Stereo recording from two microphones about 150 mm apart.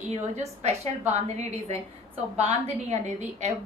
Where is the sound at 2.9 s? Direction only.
50° right (ahead or behind).